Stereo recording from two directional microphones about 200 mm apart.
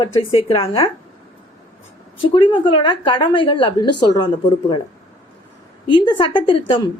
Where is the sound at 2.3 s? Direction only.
25° left (ahead or behind).